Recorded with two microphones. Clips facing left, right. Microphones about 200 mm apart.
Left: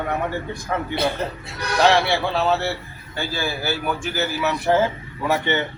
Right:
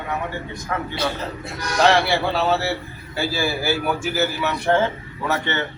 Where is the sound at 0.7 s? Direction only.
30° left (ahead or behind).